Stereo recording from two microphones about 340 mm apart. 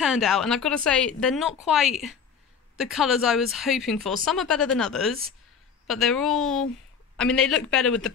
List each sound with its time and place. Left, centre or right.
0.0 s speech: centre